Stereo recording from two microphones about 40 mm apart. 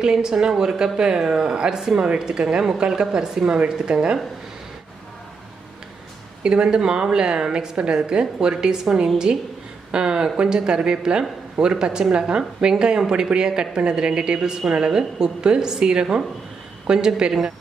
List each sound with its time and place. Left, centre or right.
0.0 s a woman's voice: centre
6.4 s a woman's voice: right